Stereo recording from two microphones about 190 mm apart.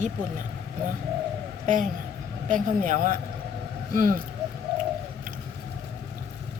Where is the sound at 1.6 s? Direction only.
45° right (ahead or behind).